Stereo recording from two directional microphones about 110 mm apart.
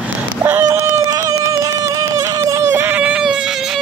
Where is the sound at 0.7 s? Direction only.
25° right (ahead or behind).